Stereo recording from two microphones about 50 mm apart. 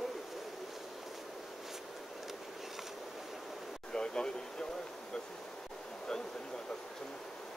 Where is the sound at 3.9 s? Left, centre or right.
Centre.